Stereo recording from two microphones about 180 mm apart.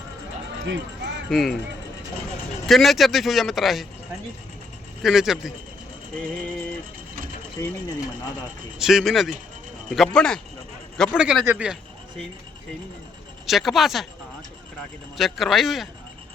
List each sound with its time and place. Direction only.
0.6 s a sound: 90° right
1.3 s a man's voice: centre (ahead or behind)
2.6 s a man's voice: centre (ahead or behind)
5.0 s a man's voice: centre (ahead or behind)
8.8 s a man's voice: centre (ahead or behind)
13.5 s a man's voice: centre (ahead or behind)
15.2 s a man's voice: centre (ahead or behind)